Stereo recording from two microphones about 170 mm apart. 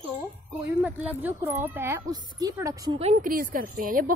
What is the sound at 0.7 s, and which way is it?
Speech, 10° right (ahead or behind).